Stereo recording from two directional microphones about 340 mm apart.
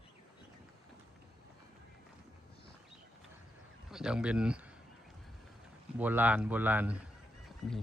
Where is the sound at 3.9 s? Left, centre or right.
Centre.